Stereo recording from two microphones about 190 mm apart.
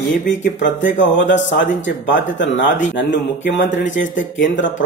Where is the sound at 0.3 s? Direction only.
70° left (ahead or behind).